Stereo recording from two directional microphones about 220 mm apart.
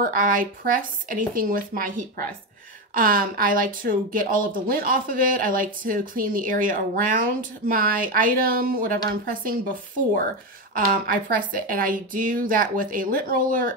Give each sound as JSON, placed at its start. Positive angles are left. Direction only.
{"t": 0.0, "sound": "speech", "side_deg": -40}
{"t": 10.7, "sound": "speech", "side_deg": -40}